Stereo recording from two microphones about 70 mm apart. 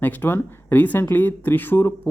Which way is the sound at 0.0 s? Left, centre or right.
Left.